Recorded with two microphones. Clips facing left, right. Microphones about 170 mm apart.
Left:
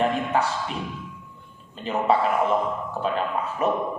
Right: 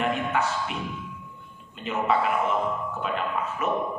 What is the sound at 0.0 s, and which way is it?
Music, 35° left (ahead or behind).